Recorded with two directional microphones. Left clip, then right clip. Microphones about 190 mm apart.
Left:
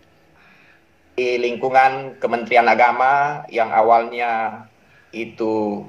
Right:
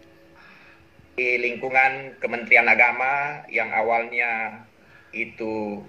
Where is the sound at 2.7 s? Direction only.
20° left (ahead or behind).